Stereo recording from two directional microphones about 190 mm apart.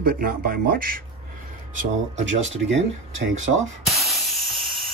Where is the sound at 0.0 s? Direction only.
50° right (ahead or behind).